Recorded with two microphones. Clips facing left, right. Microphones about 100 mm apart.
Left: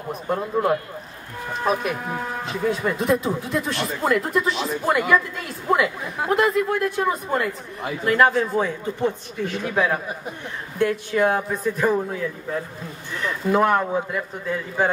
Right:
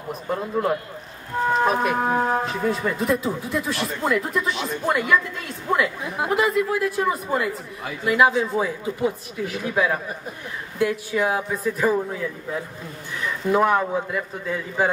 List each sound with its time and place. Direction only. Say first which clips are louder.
0.4 s a man's voice: left 2 dB; 15° left (ahead or behind)
1.8 s speech: right 6 dB; 50° right (ahead or behind)
2.4 s speech: even; centre (ahead or behind)